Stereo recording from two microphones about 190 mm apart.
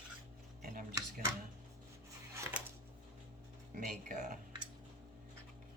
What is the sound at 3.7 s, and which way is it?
Speech, 45° right (ahead or behind).